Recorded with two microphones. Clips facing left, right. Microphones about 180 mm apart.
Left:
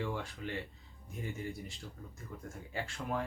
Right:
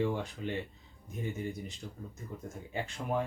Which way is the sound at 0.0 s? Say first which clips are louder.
Right 6 dB; 20° right (ahead or behind).